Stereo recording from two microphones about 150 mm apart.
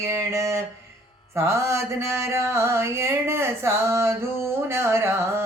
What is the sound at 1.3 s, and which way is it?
Mantra, 20° right (ahead or behind).